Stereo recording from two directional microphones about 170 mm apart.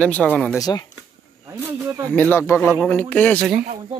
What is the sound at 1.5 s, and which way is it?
Snake, 20° right (ahead or behind).